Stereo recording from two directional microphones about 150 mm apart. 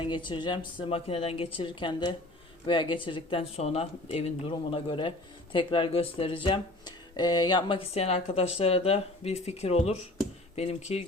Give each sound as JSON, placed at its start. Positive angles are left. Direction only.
{"t": 0.0, "sound": "speech", "side_deg": 30}